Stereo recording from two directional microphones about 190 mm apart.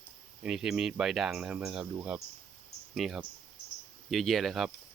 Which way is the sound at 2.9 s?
Centre (ahead or behind).